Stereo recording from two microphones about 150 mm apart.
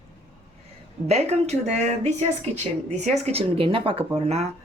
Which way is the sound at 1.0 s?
45° right (ahead or behind).